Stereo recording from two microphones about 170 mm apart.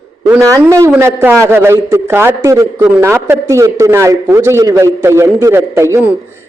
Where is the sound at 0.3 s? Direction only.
15° right (ahead or behind).